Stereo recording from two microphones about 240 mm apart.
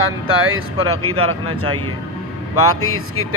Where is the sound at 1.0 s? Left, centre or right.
Right.